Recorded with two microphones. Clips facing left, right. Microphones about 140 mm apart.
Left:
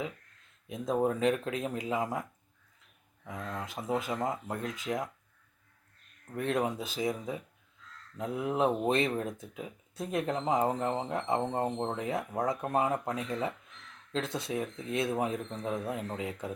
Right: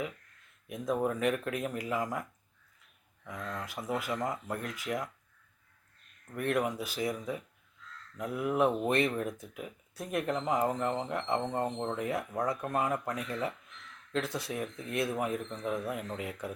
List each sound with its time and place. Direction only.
0.7 s speech: 25° left (ahead or behind)
3.2 s speech: 25° left (ahead or behind)
6.3 s speech: 25° left (ahead or behind)